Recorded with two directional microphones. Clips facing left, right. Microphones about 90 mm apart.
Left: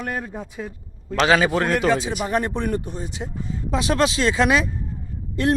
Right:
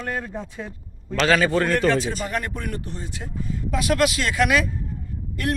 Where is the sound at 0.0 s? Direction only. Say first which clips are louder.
Even; 10° left (ahead or behind).